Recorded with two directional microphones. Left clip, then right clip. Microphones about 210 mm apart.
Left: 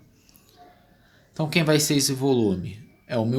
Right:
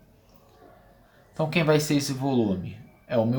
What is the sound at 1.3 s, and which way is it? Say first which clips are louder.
Speech: left 1 dB; 40° left (ahead or behind).